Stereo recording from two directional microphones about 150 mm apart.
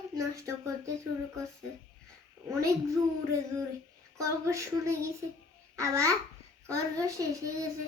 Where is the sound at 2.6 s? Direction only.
20° right (ahead or behind).